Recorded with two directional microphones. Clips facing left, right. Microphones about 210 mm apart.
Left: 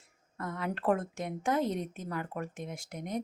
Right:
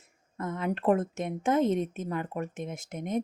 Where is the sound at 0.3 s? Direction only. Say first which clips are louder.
Right 5 dB; 20° right (ahead or behind).